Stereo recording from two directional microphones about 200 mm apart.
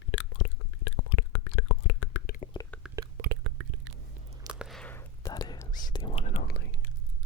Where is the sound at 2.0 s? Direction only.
90° left.